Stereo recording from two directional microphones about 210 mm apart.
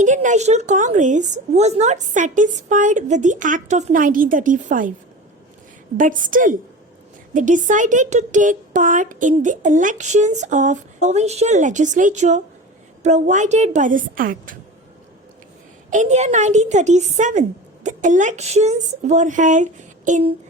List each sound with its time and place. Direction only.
0.0 s speech: 35° right (ahead or behind)
6.0 s speech: 40° right (ahead or behind)
15.9 s speech: 35° right (ahead or behind)